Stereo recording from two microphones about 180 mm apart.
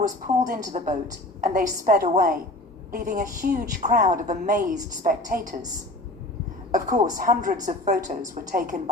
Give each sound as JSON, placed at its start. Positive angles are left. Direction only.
{"t": 0.4, "sound": "a woman's voice", "side_deg": -45}
{"t": 6.7, "sound": "a woman's voice", "side_deg": -45}